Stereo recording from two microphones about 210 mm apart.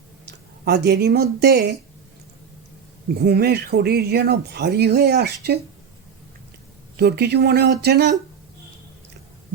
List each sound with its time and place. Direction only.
0.3 s speech: 50° right (ahead or behind)
3.2 s speech: 50° right (ahead or behind)
6.9 s speech: 50° right (ahead or behind)